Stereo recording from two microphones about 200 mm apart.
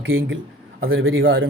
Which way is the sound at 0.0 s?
70° right (ahead or behind).